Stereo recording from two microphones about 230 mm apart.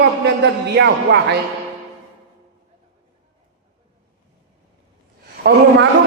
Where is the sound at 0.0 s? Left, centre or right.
Right.